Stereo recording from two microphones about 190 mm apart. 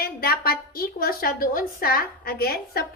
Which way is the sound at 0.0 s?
50° left (ahead or behind).